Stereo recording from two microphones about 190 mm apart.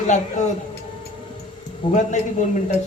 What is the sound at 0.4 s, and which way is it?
Speech, 40° left (ahead or behind).